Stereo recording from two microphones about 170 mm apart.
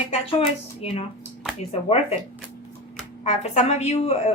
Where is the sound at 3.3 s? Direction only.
45° left (ahead or behind).